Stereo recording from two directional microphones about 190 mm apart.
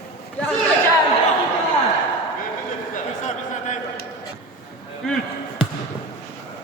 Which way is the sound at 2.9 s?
40° left (ahead or behind).